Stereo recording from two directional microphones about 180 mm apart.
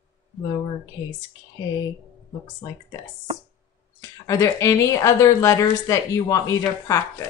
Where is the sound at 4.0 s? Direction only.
15° left (ahead or behind).